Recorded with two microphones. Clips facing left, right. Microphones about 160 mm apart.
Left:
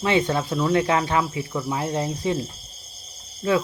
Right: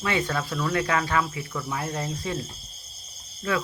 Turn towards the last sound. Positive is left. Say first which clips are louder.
# left 6 dB
turn(degrees=25)  # may be behind; listen again after turning